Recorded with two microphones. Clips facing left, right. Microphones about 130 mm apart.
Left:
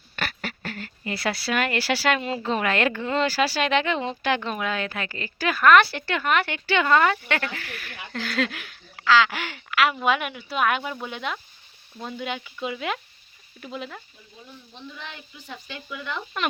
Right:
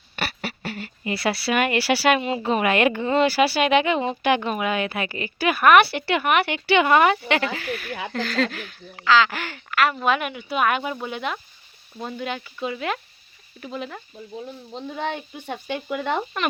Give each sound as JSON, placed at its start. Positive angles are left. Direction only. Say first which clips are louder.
{"t": 0.2, "sound": "a sound", "louder": "right 2 dB", "side_deg": -10}
{"t": 1.5, "sound": "speech", "louder": "right 4 dB", "side_deg": -10}
{"t": 8.2, "sound": "speech", "louder": "right 2 dB", "side_deg": 5}
{"t": 12.2, "sound": "speech", "louder": "right 1 dB", "side_deg": 0}
{"t": 14.4, "sound": "speech", "louder": "right 4 dB", "side_deg": -80}